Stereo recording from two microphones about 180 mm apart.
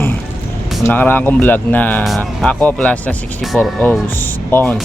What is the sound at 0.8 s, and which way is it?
Speech, 10° left (ahead or behind).